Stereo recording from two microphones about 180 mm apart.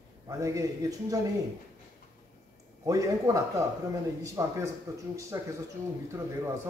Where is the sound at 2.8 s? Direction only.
20° right (ahead or behind).